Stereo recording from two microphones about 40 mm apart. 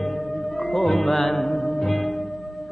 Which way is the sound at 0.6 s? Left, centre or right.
Centre.